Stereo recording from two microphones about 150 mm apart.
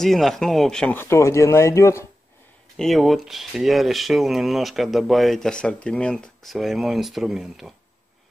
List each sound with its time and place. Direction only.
0.0 s speech: centre (ahead or behind); by 2.0 s 20° left (ahead or behind)
2.8 s speech: centre (ahead or behind)